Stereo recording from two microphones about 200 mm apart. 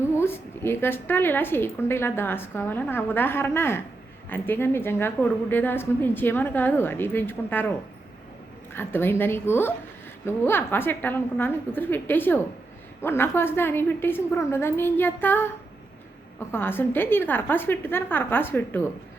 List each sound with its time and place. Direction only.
0.2 s a woman's voice: 10° left (ahead or behind)
8.7 s a woman's voice: 10° left (ahead or behind)